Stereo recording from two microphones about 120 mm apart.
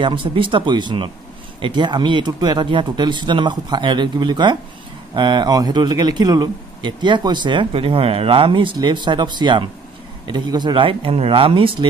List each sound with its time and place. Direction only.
0.0 s a man's voice: 45° right (ahead or behind)